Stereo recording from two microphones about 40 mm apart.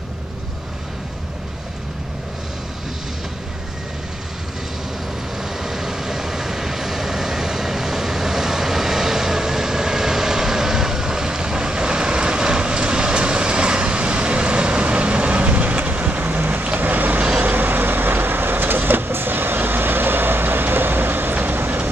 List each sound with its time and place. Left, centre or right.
5.6 s vehicle: centre; by 21.8 s right